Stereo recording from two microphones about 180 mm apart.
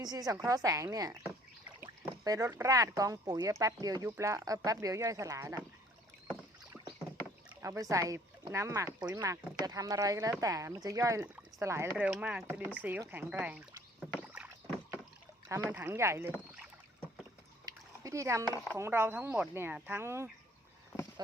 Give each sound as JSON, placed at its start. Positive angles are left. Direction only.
{"t": 0.0, "sound": "speech", "side_deg": -20}
{"t": 7.6, "sound": "speech", "side_deg": -15}
{"t": 14.0, "sound": "rowboat", "side_deg": -5}
{"t": 15.7, "sound": "speech", "side_deg": -10}
{"t": 17.7, "sound": "a sound", "side_deg": -20}
{"t": 18.8, "sound": "speech", "side_deg": -10}
{"t": 20.9, "sound": "a sound", "side_deg": -5}